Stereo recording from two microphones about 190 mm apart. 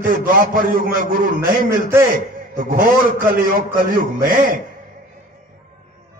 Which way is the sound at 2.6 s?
45° right (ahead or behind).